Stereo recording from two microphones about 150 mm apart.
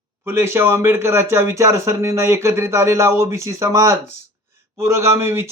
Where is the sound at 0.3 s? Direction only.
15° right (ahead or behind).